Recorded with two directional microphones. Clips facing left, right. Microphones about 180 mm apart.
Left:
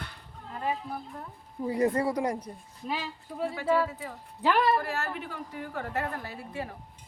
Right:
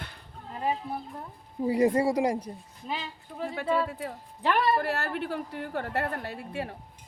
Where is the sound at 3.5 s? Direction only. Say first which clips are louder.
Left 1 dB; 60° right (ahead or behind).